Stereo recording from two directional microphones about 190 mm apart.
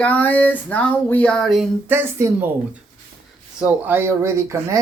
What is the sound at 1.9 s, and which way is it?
Speech, 10° right (ahead or behind).